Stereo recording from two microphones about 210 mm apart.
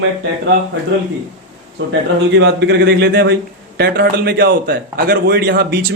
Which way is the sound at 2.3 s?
55° right (ahead or behind).